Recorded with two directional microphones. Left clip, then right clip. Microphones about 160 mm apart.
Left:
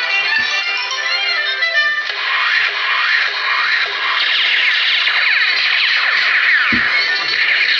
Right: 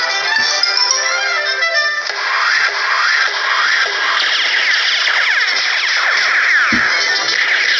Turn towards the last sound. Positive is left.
turn(degrees=-40)  # may be behind; listen again after turning